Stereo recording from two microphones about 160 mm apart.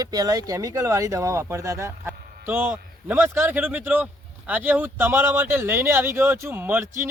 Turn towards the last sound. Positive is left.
turn(degrees=-15)  # may be behind; listen again after turning